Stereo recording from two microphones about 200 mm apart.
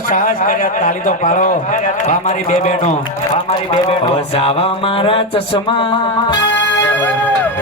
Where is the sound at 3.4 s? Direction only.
30° left (ahead or behind).